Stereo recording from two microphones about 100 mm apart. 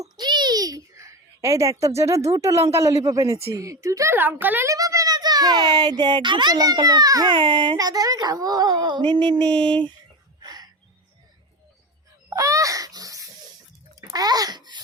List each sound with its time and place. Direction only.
0.0 s a sound: 45° right (ahead or behind); by 1.9 s 30° right (ahead or behind)
2.0 s speech: 30° right (ahead or behind)
4.1 s speech: 20° right (ahead or behind)
4.7 s a child's voice: 35° right (ahead or behind); by 9.9 s 55° right (ahead or behind)
10.4 s a sound: 40° right (ahead or behind)
12.3 s wail: 30° right (ahead or behind)
14.1 s a child's voice: 40° right (ahead or behind)